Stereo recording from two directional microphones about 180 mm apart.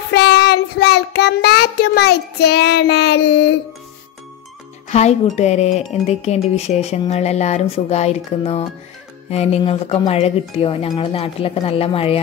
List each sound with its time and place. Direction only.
0.1 s child singing: 65° left (ahead or behind)
4.8 s speech: 40° left (ahead or behind)